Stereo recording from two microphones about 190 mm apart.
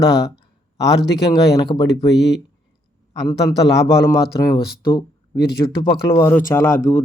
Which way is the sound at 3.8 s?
15° left (ahead or behind).